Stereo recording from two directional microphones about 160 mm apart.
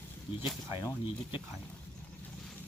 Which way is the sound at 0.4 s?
30° left (ahead or behind).